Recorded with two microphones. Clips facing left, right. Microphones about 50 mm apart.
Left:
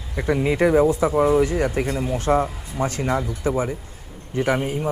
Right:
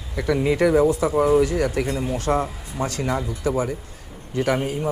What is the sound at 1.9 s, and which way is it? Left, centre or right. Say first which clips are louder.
Speech: left 1 dB; centre.